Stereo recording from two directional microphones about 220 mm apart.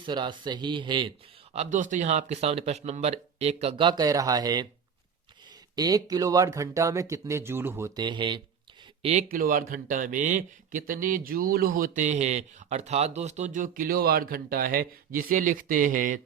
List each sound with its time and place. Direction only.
0.0 s speech: 20° right (ahead or behind)
1.5 s speech: 35° right (ahead or behind); by 4.7 s 20° right (ahead or behind)
5.7 s speech: 15° right (ahead or behind)
9.0 s speech: 30° right (ahead or behind)